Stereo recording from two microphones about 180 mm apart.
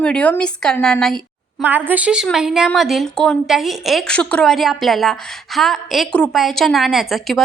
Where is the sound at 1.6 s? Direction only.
10° right (ahead or behind).